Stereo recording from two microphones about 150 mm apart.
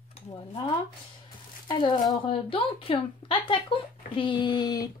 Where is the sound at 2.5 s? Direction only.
35° left (ahead or behind).